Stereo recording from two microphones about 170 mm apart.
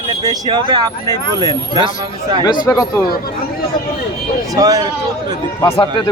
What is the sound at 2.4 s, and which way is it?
Speech, 25° left (ahead or behind).